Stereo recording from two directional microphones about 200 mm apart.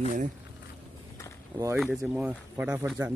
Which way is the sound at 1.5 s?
15° right (ahead or behind).